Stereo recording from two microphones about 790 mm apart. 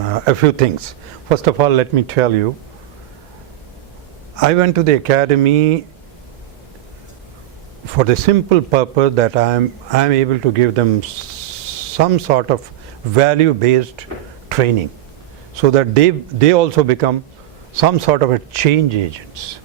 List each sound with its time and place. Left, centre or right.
0.1 s a man's voice: right
4.4 s a man's voice: right
7.9 s a man's voice: right
11.9 s a man's voice: right
15.7 s a man's voice: right